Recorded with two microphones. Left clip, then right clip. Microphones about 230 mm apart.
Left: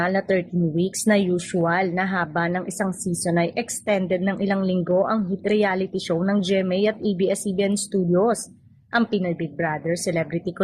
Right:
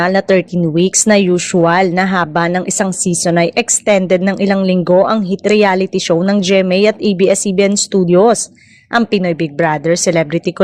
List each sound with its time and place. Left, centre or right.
0.0 s speech: right